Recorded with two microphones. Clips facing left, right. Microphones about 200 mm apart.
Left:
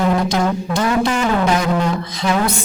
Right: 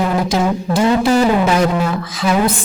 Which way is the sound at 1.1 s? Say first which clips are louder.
Right 6 dB; 35° right (ahead or behind).